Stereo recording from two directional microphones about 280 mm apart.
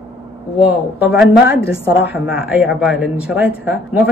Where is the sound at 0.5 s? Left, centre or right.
Centre.